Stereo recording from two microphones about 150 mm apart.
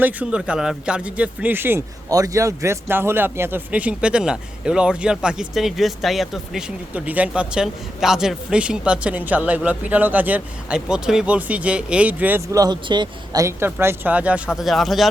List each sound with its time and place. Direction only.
0.0 s a man's voice: 10° right (ahead or behind)
12.5 s a man's voice: 25° right (ahead or behind); by 15.1 s centre (ahead or behind)